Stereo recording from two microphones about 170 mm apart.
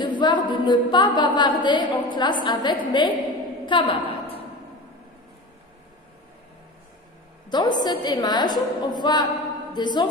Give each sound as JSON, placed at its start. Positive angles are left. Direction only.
{"t": 0.2, "sound": "a woman's voice", "side_deg": 25}
{"t": 7.4, "sound": "a woman's voice", "side_deg": 25}